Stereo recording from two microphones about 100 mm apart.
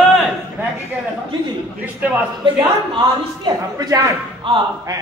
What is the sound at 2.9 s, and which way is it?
Speech, 50° right (ahead or behind).